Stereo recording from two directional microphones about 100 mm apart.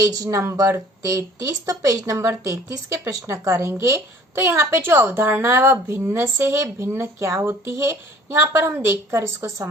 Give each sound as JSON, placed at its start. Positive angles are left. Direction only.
{"t": 0.0, "sound": "speech", "side_deg": -35}